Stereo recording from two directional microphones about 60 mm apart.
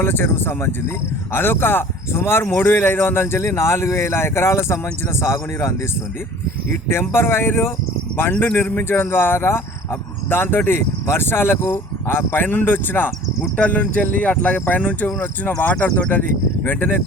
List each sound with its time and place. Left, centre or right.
0.0 s a man's voice: left
6.8 s a man's voice: left
8.3 s speech: left
8.5 s speech: left